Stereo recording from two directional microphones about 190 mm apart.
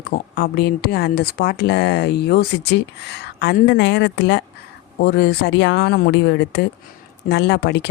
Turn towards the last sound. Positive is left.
turn(degrees=65)  # may be behind; listen again after turning